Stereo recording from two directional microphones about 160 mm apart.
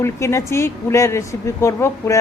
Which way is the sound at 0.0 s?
15° left (ahead or behind).